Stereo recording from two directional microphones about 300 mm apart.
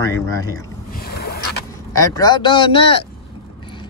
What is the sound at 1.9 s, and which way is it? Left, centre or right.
Speech, centre.